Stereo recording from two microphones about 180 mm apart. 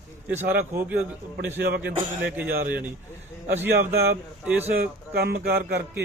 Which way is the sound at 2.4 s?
55° right (ahead or behind).